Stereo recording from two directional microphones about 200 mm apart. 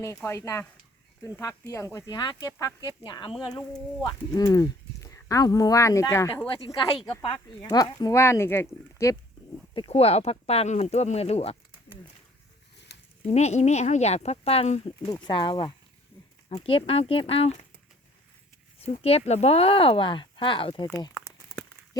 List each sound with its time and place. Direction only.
0.0 s speech: 15° left (ahead or behind)
6.5 s speech: 25° left (ahead or behind)
9.7 s speech: 25° left (ahead or behind)
12.9 s a sound: 60° left (ahead or behind)
13.3 s speech: 35° left (ahead or behind)
18.8 s speech: 30° left (ahead or behind)